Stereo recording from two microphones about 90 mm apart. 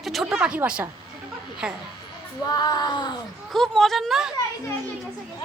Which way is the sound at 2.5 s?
50° left (ahead or behind).